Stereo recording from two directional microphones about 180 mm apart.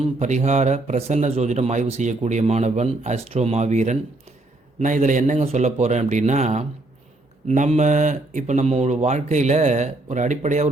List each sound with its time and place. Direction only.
0.0 s speech: 40° right (ahead or behind)